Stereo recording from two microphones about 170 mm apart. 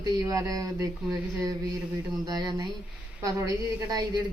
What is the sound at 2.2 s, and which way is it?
A woman's voice, 25° right (ahead or behind).